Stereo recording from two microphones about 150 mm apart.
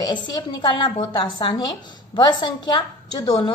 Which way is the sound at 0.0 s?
30° left (ahead or behind).